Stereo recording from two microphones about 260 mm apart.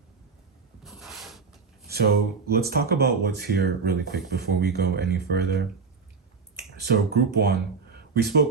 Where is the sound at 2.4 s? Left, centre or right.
Right.